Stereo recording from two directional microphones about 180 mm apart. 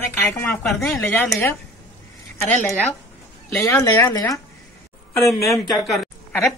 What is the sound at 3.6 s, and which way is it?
Speech, 15° left (ahead or behind).